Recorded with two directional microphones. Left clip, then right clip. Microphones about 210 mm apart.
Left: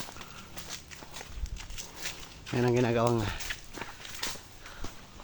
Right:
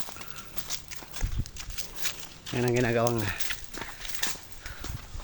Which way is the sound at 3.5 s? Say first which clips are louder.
Right 2 dB; 55° right (ahead or behind).